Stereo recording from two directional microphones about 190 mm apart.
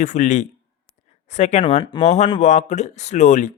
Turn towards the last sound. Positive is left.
turn(degrees=40)  # may be behind; listen again after turning